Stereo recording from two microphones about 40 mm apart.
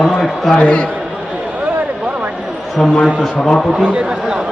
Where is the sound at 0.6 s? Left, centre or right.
Left.